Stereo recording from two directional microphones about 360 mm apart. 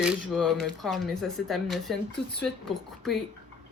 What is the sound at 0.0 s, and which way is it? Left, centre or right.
Speech, centre.